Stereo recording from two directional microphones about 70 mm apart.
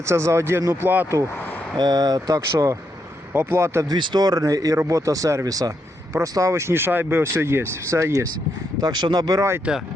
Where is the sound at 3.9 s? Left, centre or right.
Right.